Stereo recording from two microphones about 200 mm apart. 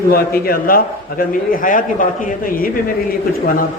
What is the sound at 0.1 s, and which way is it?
A man's voice, 45° left (ahead or behind).